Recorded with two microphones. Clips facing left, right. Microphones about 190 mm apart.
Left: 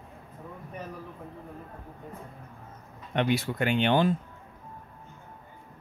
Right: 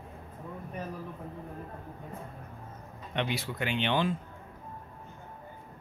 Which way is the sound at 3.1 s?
50° left (ahead or behind).